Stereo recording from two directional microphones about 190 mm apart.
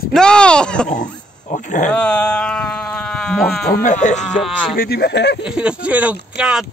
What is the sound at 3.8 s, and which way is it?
Speech, 40° left (ahead or behind).